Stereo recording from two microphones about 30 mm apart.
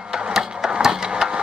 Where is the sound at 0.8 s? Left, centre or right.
Right.